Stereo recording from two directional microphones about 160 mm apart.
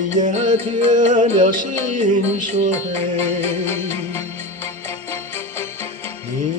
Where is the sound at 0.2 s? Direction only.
45° right (ahead or behind).